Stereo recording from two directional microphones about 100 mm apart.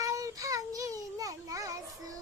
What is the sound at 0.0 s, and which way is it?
Child singing, 35° right (ahead or behind).